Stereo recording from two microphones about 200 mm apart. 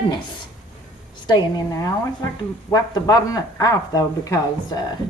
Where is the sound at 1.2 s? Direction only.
20° left (ahead or behind).